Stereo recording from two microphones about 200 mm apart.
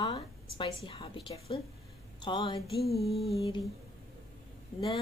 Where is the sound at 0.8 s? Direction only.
25° left (ahead or behind).